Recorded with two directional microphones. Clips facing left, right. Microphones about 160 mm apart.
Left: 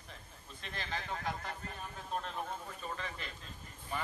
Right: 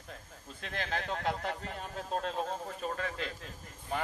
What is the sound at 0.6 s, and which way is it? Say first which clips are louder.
Speech: right 6 dB; 70° right (ahead or behind).